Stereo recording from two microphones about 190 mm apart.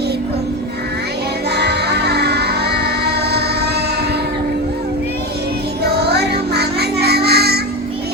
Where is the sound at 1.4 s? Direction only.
60° right (ahead or behind).